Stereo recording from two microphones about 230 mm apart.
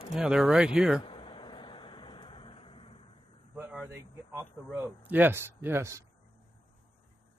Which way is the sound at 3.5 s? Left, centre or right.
Centre.